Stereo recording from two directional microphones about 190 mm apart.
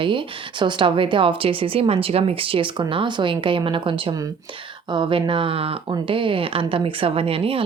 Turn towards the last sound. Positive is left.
turn(degrees=-30)  # may be behind; listen again after turning